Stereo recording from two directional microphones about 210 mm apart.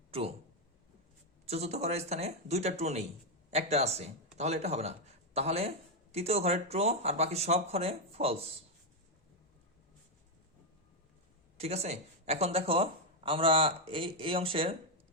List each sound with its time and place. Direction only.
0.1 s speech: 30° right (ahead or behind)
1.5 s speech: 30° right (ahead or behind)
11.5 s speech: 30° right (ahead or behind)